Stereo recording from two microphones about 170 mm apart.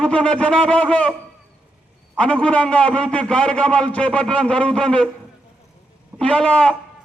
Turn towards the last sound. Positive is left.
turn(degrees=5)  # may be behind; listen again after turning